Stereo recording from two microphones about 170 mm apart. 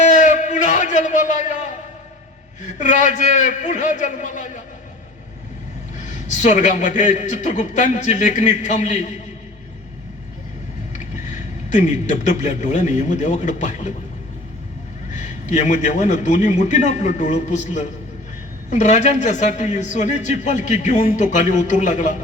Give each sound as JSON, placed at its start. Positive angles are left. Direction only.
{"t": 0.0, "sound": "a sound", "side_deg": 45}
{"t": 2.7, "sound": "a man's voice", "side_deg": 45}
{"t": 6.0, "sound": "a man's voice", "side_deg": 45}
{"t": 10.9, "sound": "a man's voice", "side_deg": 45}
{"t": 15.1, "sound": "a man's voice", "side_deg": 45}